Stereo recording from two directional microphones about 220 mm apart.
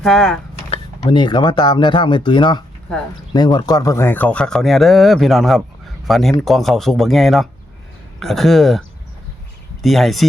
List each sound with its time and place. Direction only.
0.0 s speech: centre (ahead or behind)
0.7 s speech: 25° left (ahead or behind); by 8.8 s centre (ahead or behind)
9.8 s speech: centre (ahead or behind)